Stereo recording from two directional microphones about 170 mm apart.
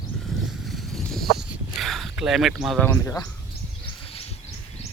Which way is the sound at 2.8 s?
15° left (ahead or behind).